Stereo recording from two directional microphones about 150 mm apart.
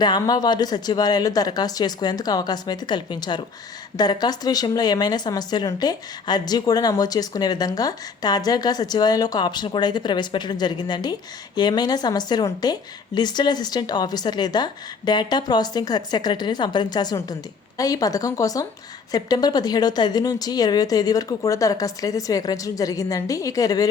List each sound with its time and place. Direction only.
0.0 s a woman's voice: 25° left (ahead or behind)